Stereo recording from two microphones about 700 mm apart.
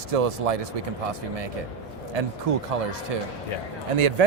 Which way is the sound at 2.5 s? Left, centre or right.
Right.